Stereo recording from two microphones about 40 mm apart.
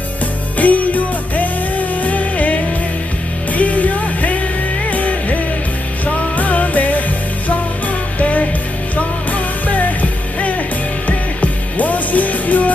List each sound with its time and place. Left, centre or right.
0.6 s music: left
8.2 s music: left